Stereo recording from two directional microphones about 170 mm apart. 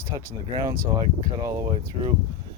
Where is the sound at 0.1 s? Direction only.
20° right (ahead or behind).